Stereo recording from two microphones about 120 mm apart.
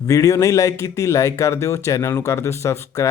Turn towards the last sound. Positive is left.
turn(degrees=25)  # may be behind; listen again after turning